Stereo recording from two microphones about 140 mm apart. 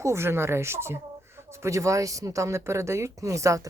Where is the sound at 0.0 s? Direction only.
20° right (ahead or behind).